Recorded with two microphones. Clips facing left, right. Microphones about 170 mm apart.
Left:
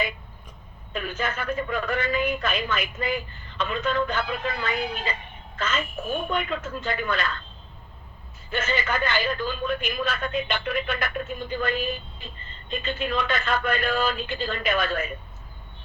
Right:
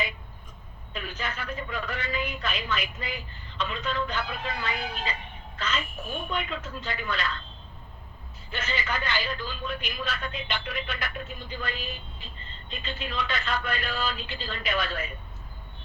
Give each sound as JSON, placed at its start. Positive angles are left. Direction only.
{"t": 0.9, "sound": "a man's voice", "side_deg": 50}
{"t": 8.4, "sound": "a man's voice", "side_deg": 50}